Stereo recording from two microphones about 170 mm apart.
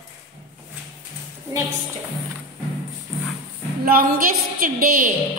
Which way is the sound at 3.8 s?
60° right (ahead or behind).